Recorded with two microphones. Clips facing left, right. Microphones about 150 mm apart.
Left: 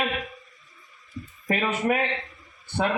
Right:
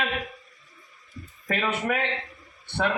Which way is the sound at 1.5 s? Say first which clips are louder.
Left 2 dB; 15° left (ahead or behind).